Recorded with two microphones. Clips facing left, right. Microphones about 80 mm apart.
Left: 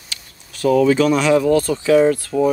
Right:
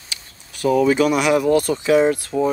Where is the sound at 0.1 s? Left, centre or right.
Centre.